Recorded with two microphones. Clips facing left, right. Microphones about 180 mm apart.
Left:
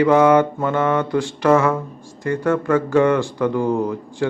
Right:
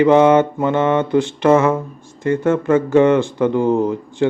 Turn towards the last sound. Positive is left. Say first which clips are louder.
# right 4 dB
turn(degrees=-25)  # may be behind; listen again after turning